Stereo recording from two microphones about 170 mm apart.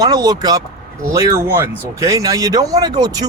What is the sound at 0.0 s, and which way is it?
Speech, 25° right (ahead or behind).